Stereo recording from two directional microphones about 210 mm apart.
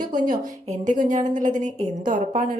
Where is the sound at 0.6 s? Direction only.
35° right (ahead or behind).